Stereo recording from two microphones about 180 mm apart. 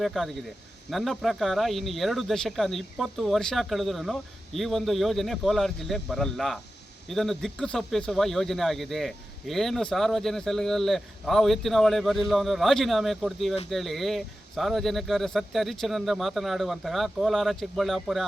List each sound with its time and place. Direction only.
0.0 s speech: centre (ahead or behind)